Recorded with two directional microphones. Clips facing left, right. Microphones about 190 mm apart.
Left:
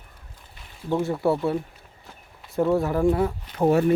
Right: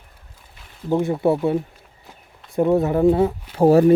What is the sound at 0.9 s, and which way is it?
Speech, 20° right (ahead or behind).